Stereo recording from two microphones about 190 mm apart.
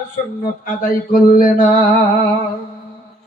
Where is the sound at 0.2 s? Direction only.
45° left (ahead or behind).